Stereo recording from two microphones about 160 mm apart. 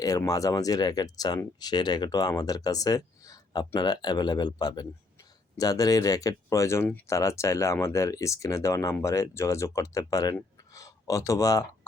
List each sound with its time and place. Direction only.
0.0 s speech: 20° left (ahead or behind)